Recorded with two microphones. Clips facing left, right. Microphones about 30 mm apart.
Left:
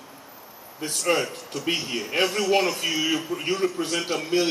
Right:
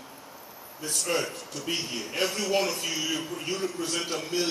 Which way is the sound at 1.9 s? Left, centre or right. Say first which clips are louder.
Left 5 dB; left.